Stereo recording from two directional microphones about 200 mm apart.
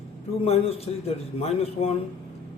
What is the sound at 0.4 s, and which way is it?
A man's voice, 30° left (ahead or behind).